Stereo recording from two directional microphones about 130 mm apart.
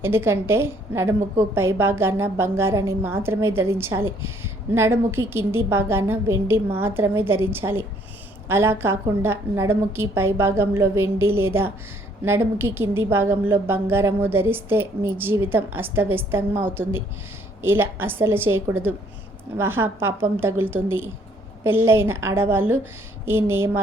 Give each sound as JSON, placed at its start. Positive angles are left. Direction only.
{"t": 0.0, "sound": "a woman's voice", "side_deg": -20}